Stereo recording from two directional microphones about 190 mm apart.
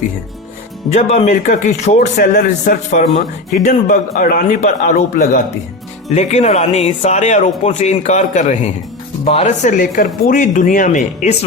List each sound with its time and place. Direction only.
0.9 s a man's voice: 35° left (ahead or behind)